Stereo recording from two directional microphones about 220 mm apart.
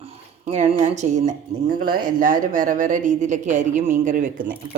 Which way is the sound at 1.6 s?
45° right (ahead or behind).